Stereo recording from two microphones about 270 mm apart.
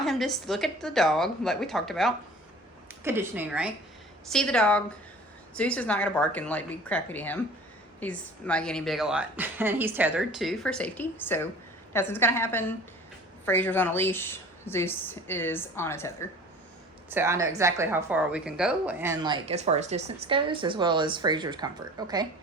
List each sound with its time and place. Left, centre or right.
0.0 s a woman's voice: centre
17.1 s a woman's voice: centre